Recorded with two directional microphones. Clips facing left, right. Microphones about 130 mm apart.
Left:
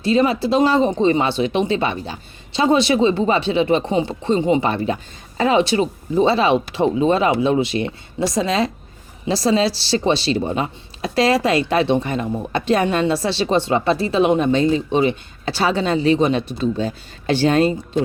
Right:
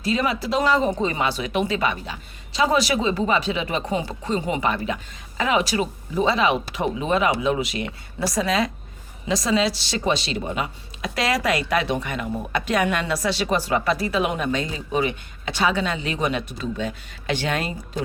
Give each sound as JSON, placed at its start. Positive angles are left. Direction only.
{"t": 0.0, "sound": "a woman's voice", "side_deg": 30}